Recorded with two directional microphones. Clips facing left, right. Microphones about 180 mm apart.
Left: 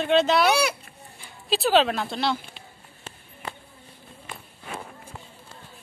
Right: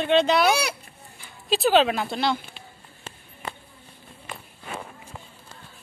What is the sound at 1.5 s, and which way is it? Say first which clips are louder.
Speech: right 1 dB; centre (ahead or behind).